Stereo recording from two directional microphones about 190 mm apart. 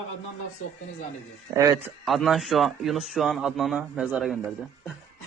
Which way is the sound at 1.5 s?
15° right (ahead or behind).